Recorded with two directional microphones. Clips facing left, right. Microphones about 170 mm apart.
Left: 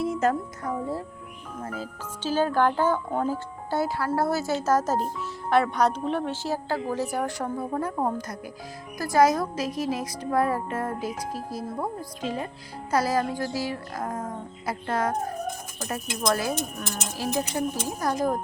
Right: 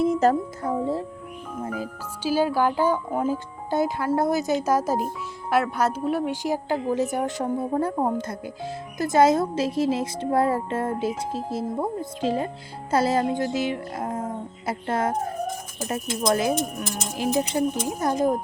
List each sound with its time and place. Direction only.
0.2 s speech: 30° right (ahead or behind)
1.6 s speech: 15° right (ahead or behind)